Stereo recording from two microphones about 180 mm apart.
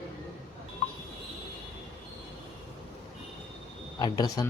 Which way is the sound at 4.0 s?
20° left (ahead or behind).